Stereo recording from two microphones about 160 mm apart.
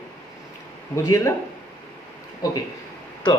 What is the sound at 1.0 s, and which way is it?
Speech, 20° left (ahead or behind).